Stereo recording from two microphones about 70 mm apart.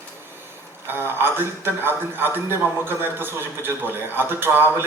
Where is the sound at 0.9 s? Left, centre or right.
Right.